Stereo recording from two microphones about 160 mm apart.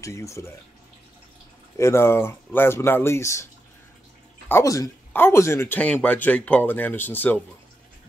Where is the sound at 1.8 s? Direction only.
15° left (ahead or behind).